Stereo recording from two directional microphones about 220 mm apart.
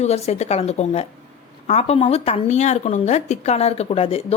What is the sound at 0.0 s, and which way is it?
Speech, 30° left (ahead or behind).